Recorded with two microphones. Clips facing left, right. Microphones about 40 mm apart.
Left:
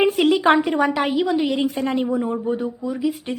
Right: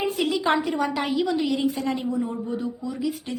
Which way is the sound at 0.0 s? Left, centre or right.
Left.